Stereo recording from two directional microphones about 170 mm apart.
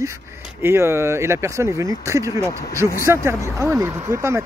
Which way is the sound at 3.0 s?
15° right (ahead or behind).